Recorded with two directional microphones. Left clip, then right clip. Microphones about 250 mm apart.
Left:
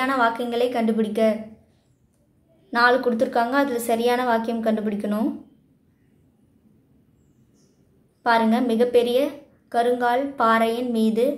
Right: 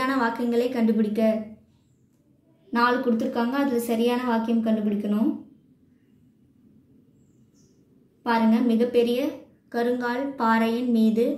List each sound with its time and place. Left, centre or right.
0.0 s a woman's voice: left
2.7 s a woman's voice: left
8.2 s a woman's voice: left